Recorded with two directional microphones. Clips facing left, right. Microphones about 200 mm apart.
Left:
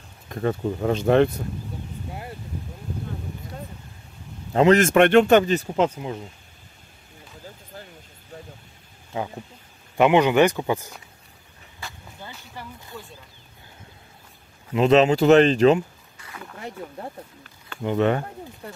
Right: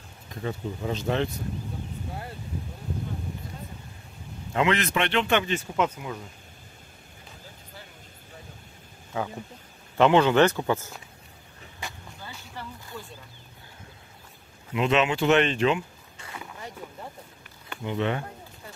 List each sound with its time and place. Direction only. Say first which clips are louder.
0.3 s speech: left 8 dB; 60° left (ahead or behind)
4.6 s speech: left 9 dB; 40° left (ahead or behind)
9.9 s speech: left 2 dB; 15° left (ahead or behind)
11.8 s a sound: right 1 dB; 15° right (ahead or behind)
12.6 s a sound: even; 10° left (ahead or behind)
12.9 s speech: left 1 dB; centre (ahead or behind)
14.7 s speech: left 7 dB; 35° left (ahead or behind)
17.8 s speech: left 7 dB; 50° left (ahead or behind)